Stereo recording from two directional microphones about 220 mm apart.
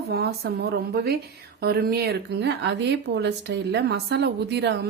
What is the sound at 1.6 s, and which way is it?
Speech, 45° right (ahead or behind).